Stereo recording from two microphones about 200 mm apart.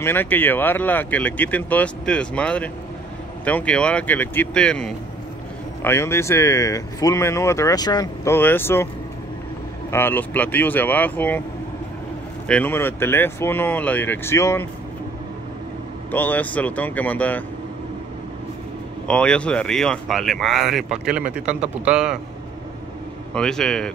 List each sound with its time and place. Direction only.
0.0 s speech: 10° left (ahead or behind)
9.8 s speech: 10° left (ahead or behind)
12.4 s speech: 10° left (ahead or behind)
16.1 s speech: 10° left (ahead or behind)
19.0 s speech: 5° left (ahead or behind)
23.3 s speech: 5° left (ahead or behind)